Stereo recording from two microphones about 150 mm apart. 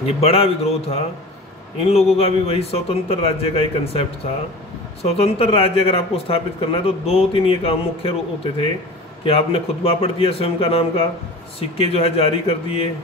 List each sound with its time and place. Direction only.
0.0 s speech: 40° left (ahead or behind)